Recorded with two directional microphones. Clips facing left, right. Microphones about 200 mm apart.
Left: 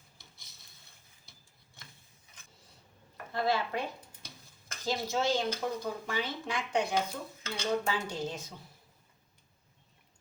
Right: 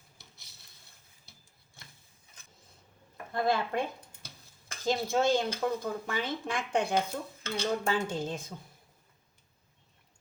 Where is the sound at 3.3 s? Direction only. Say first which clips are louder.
Right 2 dB; 50° right (ahead or behind).